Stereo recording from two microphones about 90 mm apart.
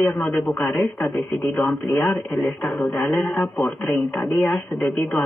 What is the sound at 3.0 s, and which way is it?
Speech, 15° left (ahead or behind).